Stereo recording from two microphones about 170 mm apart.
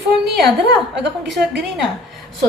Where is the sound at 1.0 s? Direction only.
90° right.